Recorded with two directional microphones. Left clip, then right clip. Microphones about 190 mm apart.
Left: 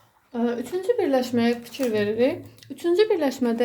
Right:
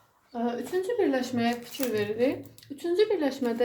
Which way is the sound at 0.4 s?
55° left (ahead or behind).